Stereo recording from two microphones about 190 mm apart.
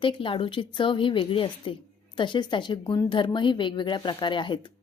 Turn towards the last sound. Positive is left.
turn(degrees=25)  # may be behind; listen again after turning